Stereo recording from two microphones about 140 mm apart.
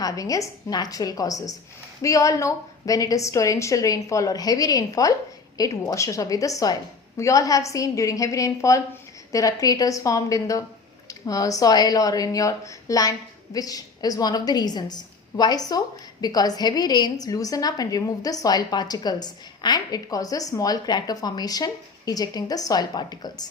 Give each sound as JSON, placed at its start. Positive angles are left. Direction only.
{"t": 0.0, "sound": "a woman's voice", "side_deg": 25}